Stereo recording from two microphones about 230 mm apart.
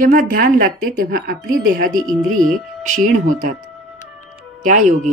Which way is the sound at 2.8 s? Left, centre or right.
Right.